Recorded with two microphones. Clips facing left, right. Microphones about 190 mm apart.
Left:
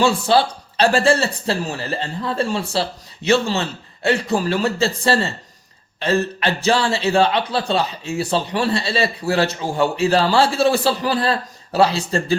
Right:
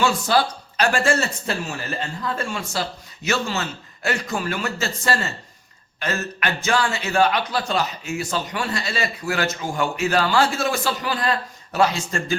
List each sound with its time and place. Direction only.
0.0 s a man's voice: 30° left (ahead or behind)